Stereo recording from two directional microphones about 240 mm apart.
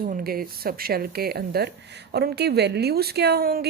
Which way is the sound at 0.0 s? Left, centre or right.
Right.